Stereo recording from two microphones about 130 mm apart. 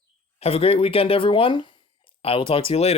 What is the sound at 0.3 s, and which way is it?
Speech, 50° left (ahead or behind).